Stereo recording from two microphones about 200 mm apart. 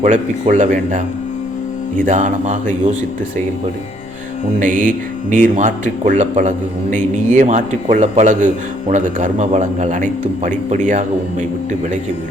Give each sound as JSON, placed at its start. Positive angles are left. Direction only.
{"t": 0.0, "sound": "a man's voice", "side_deg": -35}
{"t": 2.0, "sound": "a man's voice", "side_deg": -40}
{"t": 4.6, "sound": "a man's voice", "side_deg": -40}